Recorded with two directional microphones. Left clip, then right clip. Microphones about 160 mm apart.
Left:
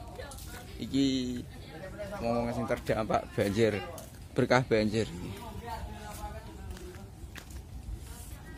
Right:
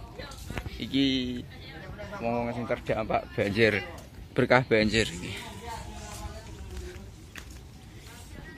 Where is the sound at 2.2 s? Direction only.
20° left (ahead or behind).